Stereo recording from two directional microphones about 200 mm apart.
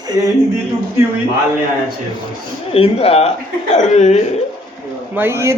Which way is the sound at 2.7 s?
30° left (ahead or behind).